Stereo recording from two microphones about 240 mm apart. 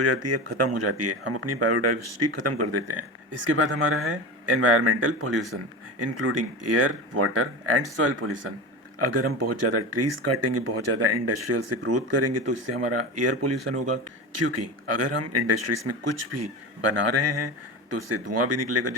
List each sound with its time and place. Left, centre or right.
0.0 s speech: right
3.5 s speech: right
9.0 s speech: right